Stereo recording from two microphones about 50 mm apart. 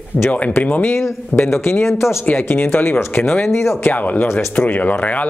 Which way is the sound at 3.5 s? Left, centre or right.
Left.